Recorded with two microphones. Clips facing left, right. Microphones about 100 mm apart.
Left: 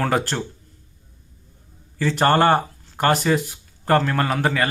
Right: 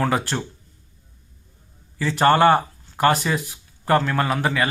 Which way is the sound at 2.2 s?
45° left (ahead or behind).